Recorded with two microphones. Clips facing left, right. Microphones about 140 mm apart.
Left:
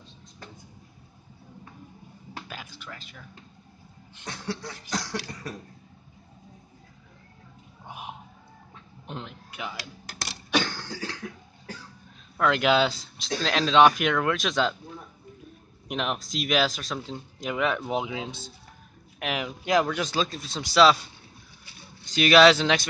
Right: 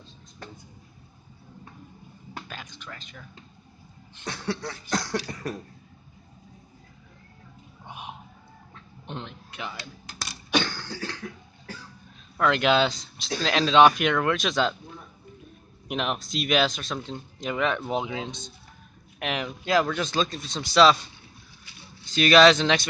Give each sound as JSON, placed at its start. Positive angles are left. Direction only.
{"t": 2.4, "sound": "speech", "side_deg": 10}
{"t": 4.3, "sound": "beatboxing", "side_deg": -70}
{"t": 7.8, "sound": "a sound", "side_deg": 0}
{"t": 10.5, "sound": "cough", "side_deg": 5}
{"t": 12.4, "sound": "speech", "side_deg": 5}
{"t": 15.9, "sound": "speech", "side_deg": 0}
{"t": 19.6, "sound": "speech", "side_deg": 15}